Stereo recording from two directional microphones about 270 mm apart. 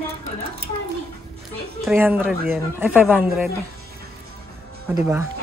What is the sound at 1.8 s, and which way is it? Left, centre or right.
Speech, centre.